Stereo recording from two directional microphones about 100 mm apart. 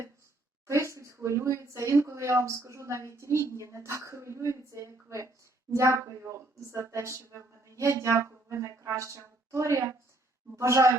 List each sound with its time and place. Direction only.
0.7 s a woman's voice: 30° right (ahead or behind)